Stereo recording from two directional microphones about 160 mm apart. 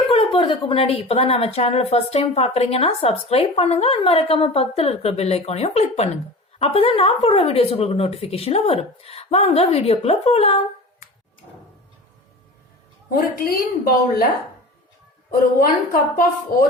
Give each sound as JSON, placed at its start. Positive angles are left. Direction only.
{"t": 0.1, "sound": "a woman's voice", "side_deg": 35}
{"t": 13.1, "sound": "a woman's voice", "side_deg": 65}
{"t": 15.3, "sound": "a woman's voice", "side_deg": 60}